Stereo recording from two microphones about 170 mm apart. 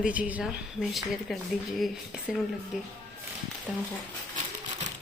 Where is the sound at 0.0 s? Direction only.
10° right (ahead or behind).